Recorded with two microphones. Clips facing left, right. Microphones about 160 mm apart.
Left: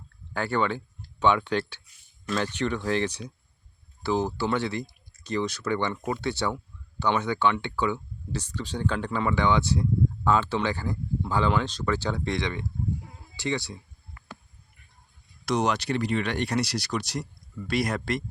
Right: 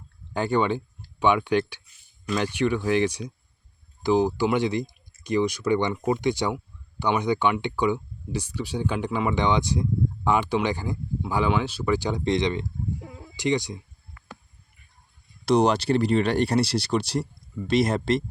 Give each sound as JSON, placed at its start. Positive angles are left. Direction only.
{"t": 0.3, "sound": "speech", "side_deg": -15}
{"t": 13.0, "sound": "a sound", "side_deg": -90}
{"t": 13.3, "sound": "speech", "side_deg": -15}
{"t": 15.4, "sound": "speech", "side_deg": -30}